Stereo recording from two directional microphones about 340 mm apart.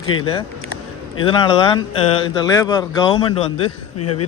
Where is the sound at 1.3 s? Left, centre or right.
Centre.